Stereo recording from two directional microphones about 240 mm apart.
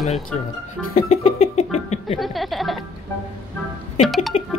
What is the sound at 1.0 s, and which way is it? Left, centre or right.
Speech, left.